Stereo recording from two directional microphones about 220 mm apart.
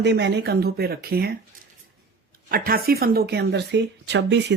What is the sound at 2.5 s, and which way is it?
Speech, 40° right (ahead or behind).